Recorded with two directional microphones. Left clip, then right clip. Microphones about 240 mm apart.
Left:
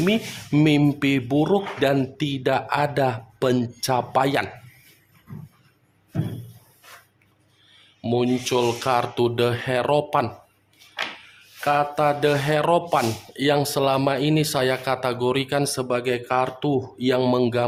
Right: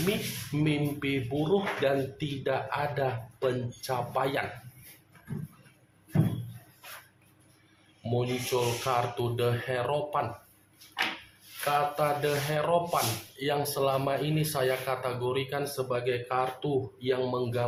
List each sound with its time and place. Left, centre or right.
0.5 s speech: left
8.1 s speech: left
11.6 s speech: left